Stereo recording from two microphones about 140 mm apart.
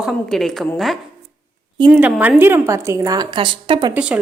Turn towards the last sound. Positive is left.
turn(degrees=-10)  # may be behind; listen again after turning